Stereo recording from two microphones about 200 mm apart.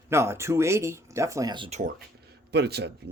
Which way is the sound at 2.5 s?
55° right (ahead or behind).